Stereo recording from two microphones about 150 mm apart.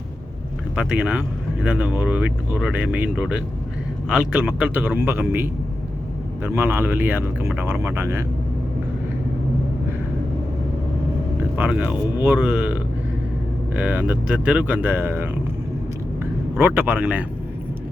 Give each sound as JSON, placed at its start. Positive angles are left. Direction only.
{"t": 0.8, "sound": "speech", "side_deg": -5}
{"t": 11.5, "sound": "speech", "side_deg": -10}
{"t": 13.7, "sound": "speech", "side_deg": -10}
{"t": 16.6, "sound": "speech", "side_deg": -10}